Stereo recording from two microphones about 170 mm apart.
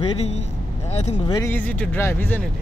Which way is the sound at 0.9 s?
40° left (ahead or behind).